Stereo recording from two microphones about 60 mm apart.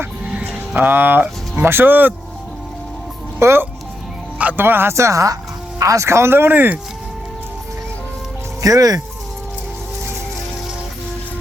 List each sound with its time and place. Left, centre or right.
0.3 s speech: right
3.3 s speech: right
4.9 s speech: right
8.6 s speech: right